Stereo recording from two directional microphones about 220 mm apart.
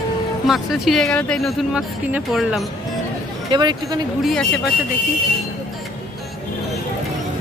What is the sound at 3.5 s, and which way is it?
Speech, 20° right (ahead or behind).